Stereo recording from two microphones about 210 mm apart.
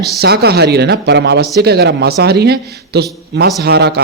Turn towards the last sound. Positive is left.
turn(degrees=-50)  # may be behind; listen again after turning